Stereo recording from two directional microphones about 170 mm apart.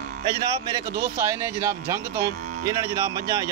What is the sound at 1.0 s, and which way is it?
Speech, 15° right (ahead or behind).